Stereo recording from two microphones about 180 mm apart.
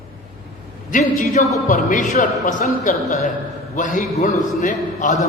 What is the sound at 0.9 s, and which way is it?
A man's voice, 45° left (ahead or behind).